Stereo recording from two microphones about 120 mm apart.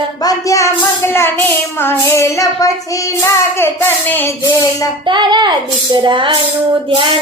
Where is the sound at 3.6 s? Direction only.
15° left (ahead or behind).